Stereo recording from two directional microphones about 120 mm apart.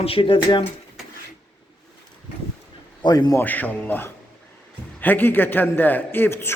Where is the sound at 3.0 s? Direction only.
35° left (ahead or behind).